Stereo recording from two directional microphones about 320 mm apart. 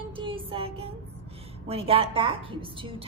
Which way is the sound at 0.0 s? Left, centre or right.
Centre.